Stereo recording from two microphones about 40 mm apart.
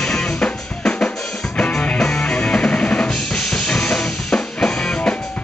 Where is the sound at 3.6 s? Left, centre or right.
Centre.